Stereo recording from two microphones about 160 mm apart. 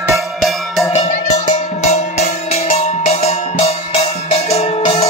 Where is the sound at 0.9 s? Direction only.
45° left (ahead or behind).